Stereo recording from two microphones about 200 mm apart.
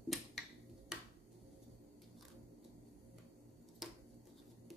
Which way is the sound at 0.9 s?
5° right (ahead or behind).